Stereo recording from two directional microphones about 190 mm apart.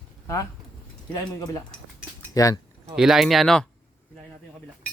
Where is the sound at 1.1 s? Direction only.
20° left (ahead or behind).